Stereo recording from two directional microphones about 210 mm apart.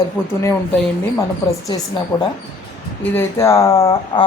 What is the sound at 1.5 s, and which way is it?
Speech, 15° left (ahead or behind).